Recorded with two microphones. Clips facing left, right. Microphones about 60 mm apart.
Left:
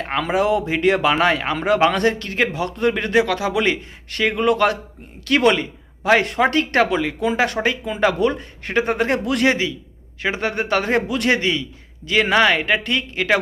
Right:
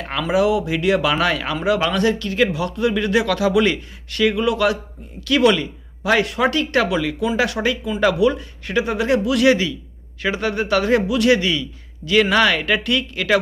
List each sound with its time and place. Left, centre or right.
0.0 s speech: left
1.2 s speech: left
1.5 s speech: left
9.5 s speech: left